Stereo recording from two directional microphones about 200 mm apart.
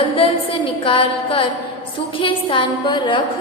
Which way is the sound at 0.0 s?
25° left (ahead or behind).